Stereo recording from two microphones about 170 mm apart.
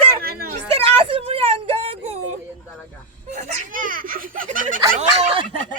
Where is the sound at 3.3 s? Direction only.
50° right (ahead or behind).